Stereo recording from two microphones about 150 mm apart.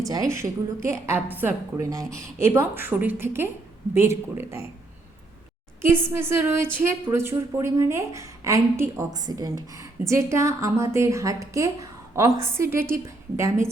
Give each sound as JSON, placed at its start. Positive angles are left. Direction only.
{"t": 0.1, "sound": "a woman's voice", "side_deg": -20}
{"t": 5.8, "sound": "a woman's voice", "side_deg": -15}